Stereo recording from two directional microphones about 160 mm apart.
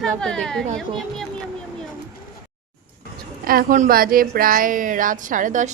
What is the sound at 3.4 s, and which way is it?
A woman's voice, 60° right (ahead or behind).